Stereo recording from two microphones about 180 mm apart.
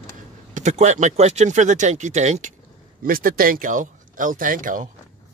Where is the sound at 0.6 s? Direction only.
40° right (ahead or behind).